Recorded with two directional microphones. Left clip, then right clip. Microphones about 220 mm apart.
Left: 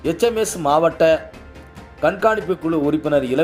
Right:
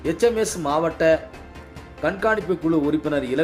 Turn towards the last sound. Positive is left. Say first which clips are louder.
# left 5 dB
turn(degrees=10)  # may be behind; listen again after turning